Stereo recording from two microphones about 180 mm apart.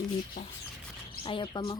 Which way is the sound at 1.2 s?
25° left (ahead or behind).